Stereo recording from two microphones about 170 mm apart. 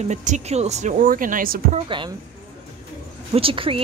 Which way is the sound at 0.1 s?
45° right (ahead or behind).